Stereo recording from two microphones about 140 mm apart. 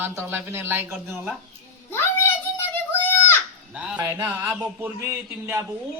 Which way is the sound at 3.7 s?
10° right (ahead or behind).